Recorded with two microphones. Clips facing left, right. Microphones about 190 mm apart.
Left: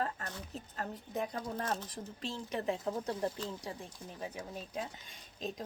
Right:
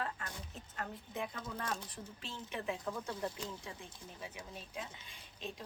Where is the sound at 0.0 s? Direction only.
40° left (ahead or behind).